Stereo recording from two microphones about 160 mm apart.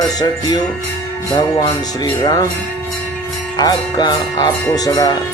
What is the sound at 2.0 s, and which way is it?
Music, 25° left (ahead or behind).